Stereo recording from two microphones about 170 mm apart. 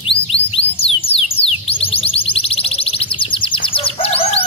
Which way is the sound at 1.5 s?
35° left (ahead or behind).